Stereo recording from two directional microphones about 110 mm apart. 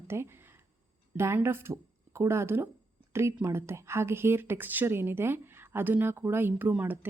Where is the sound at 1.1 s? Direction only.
25° right (ahead or behind).